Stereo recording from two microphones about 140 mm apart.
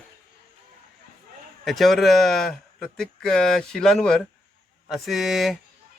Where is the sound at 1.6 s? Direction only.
Centre (ahead or behind).